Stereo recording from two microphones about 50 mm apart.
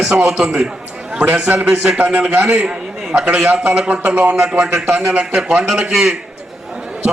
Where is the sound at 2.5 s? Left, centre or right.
Right.